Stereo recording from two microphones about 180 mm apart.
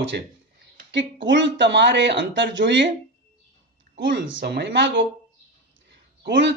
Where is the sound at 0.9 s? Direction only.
80° right.